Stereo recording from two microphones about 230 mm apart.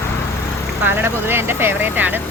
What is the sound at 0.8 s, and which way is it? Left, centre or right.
Speech, centre.